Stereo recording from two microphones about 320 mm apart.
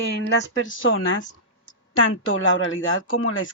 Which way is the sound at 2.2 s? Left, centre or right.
Left.